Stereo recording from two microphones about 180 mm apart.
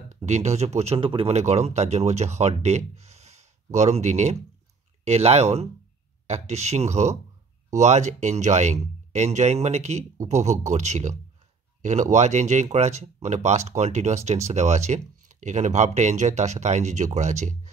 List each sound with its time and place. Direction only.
0.1 s speech: 40° right (ahead or behind)